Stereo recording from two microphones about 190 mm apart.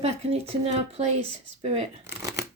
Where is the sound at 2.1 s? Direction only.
15° right (ahead or behind).